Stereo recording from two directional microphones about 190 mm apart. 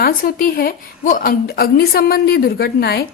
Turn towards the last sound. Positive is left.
turn(degrees=55)  # may be behind; listen again after turning